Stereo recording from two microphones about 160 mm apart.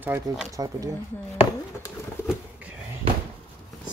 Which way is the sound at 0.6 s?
20° right (ahead or behind).